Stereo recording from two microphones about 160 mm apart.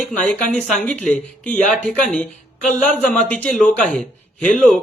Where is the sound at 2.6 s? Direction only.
50° left (ahead or behind).